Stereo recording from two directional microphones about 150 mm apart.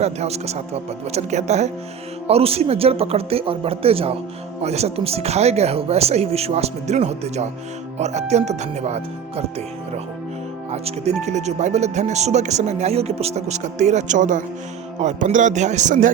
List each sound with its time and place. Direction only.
0.0 s speech: 45° right (ahead or behind)
10.7 s speech: 45° right (ahead or behind)